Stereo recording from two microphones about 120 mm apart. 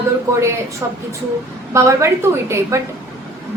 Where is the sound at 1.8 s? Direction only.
25° right (ahead or behind).